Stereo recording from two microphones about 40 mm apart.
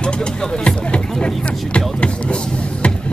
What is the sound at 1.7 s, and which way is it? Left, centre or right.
Vehicle, left.